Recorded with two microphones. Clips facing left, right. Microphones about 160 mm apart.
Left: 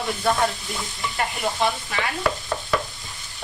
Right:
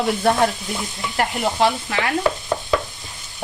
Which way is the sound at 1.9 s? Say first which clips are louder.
Right 4 dB; 70° right (ahead or behind).